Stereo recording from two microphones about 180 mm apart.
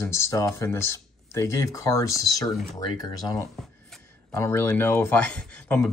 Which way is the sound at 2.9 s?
20° left (ahead or behind).